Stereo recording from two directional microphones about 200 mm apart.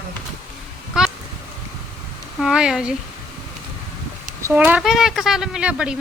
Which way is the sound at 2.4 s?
5° right (ahead or behind).